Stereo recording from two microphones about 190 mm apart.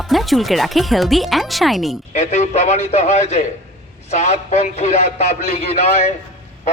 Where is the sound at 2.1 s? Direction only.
35° left (ahead or behind).